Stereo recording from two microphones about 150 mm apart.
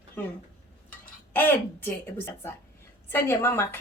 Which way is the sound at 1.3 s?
15° left (ahead or behind).